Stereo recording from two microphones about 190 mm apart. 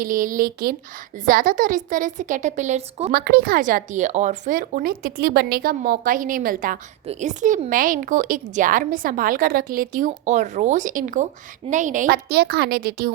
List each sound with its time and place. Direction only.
0.0 s a woman's voice: 45° right (ahead or behind)
3.1 s a woman's voice: 55° right (ahead or behind)